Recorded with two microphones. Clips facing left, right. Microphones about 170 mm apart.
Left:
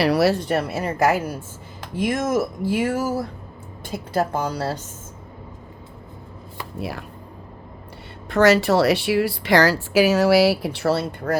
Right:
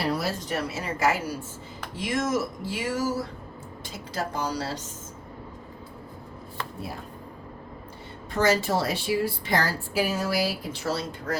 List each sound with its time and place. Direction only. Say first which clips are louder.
0.0 s a woman's voice: left 10 dB; 75° left (ahead or behind); by 4.8 s 55° left (ahead or behind)
6.7 s speech: left 10 dB; 80° left
8.3 s speech: left 7 dB; 70° left (ahead or behind)